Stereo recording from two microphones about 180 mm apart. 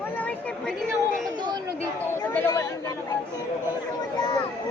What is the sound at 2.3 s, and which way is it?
Speech, 10° left (ahead or behind).